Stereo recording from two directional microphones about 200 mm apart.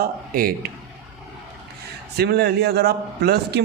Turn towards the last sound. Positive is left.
turn(degrees=-55)  # may be behind; listen again after turning